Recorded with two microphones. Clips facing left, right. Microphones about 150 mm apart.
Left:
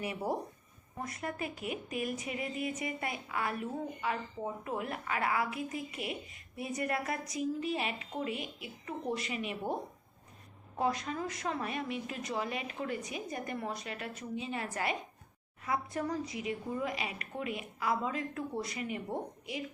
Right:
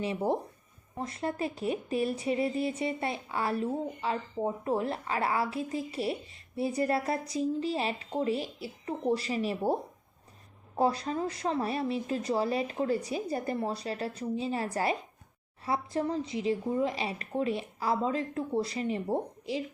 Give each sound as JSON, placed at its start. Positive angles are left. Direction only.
{"t": 0.0, "sound": "speech", "side_deg": -25}
{"t": 10.8, "sound": "speech", "side_deg": -35}